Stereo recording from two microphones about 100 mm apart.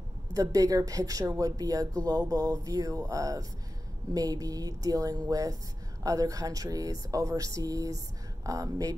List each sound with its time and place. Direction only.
0.3 s speech: 35° right (ahead or behind)